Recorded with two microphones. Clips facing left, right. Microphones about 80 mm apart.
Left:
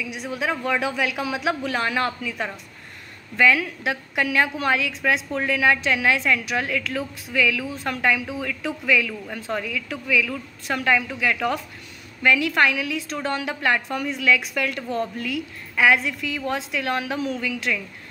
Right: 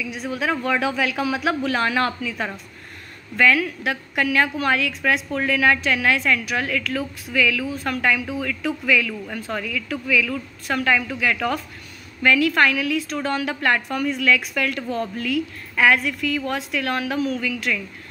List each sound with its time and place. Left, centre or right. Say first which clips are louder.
0.0 s a woman's voice: right 2 dB; centre
3.3 s a woman's voice: right 1 dB; centre